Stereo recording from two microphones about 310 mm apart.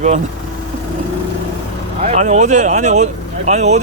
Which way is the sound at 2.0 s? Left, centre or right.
Right.